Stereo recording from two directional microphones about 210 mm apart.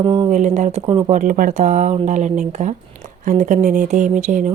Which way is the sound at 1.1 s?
40° right (ahead or behind).